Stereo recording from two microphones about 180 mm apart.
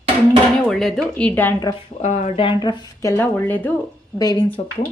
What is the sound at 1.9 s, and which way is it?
Speech, 40° left (ahead or behind).